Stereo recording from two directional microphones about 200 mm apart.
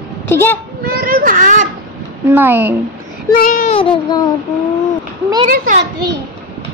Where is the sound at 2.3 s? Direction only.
10° right (ahead or behind).